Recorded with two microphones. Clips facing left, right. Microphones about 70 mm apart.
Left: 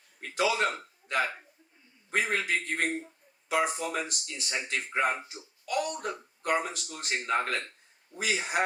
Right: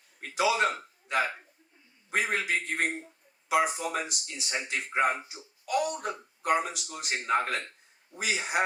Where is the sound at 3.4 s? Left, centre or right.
Centre.